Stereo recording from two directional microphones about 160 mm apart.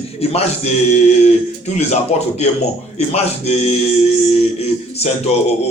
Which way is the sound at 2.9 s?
40° left (ahead or behind).